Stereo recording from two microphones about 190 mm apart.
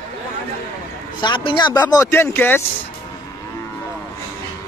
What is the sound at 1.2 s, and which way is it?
A man's voice, 25° left (ahead or behind).